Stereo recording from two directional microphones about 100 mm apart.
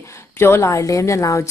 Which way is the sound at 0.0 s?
25° left (ahead or behind).